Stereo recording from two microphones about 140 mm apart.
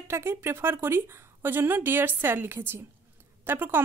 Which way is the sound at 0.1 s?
20° right (ahead or behind).